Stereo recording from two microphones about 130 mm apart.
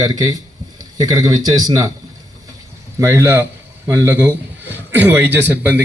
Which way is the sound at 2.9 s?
20° right (ahead or behind).